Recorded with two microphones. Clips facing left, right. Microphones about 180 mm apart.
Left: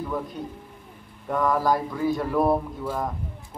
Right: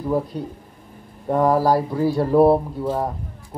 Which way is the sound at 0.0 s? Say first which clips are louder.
Right 7 dB; 35° right (ahead or behind).